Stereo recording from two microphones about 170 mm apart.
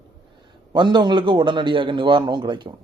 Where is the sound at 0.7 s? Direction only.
25° right (ahead or behind).